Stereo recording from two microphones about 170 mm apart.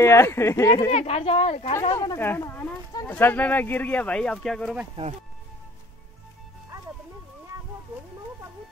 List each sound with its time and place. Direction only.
0.0 s speech: 15° left (ahead or behind)
0.9 s speech: 40° left (ahead or behind)
2.0 s speech: 15° left (ahead or behind)